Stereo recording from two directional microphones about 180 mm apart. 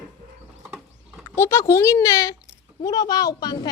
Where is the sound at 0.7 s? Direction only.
5° right (ahead or behind).